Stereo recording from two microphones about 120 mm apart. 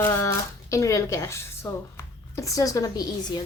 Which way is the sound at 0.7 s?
25° left (ahead or behind).